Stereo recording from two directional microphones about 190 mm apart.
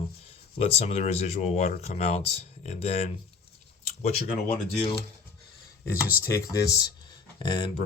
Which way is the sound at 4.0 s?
45° left (ahead or behind).